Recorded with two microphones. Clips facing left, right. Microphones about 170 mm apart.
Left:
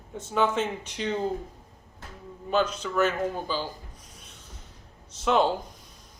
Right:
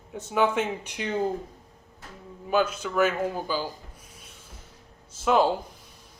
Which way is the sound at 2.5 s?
10° right (ahead or behind).